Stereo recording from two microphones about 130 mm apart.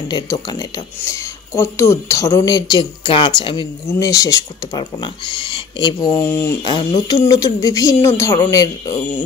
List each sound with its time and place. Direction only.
0.1 s speech: 30° left (ahead or behind)
6.1 s speech: 15° left (ahead or behind)
6.6 s speech: 35° left (ahead or behind)